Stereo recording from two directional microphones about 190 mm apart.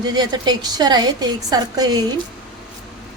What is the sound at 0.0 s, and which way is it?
A woman's voice, 20° right (ahead or behind).